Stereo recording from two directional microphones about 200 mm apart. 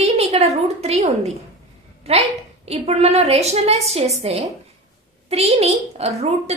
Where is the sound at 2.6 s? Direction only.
30° right (ahead or behind).